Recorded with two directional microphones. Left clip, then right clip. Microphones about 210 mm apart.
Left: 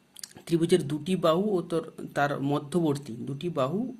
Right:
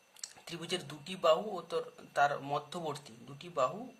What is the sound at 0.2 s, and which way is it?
Speech, 30° left (ahead or behind).